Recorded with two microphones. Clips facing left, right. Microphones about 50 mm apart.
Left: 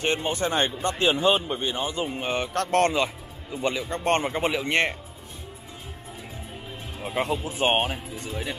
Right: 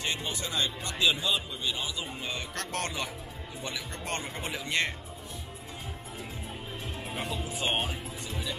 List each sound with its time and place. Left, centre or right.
0.0 s speech: left
7.2 s speech: left